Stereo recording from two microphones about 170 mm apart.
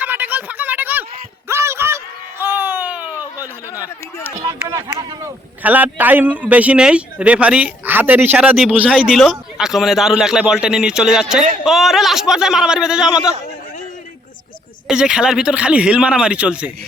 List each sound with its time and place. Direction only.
0.0 s a sound: 10° right (ahead or behind)
4.7 s speech: 20° right (ahead or behind)
5.6 s a man's voice: 10° right (ahead or behind)
14.8 s a man's voice: 5° right (ahead or behind)